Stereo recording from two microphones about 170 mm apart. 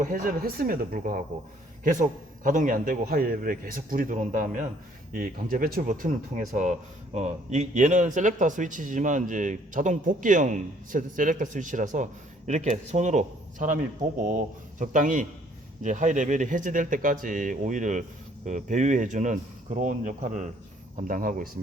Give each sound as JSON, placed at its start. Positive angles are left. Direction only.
{"t": 0.0, "sound": "speech", "side_deg": -55}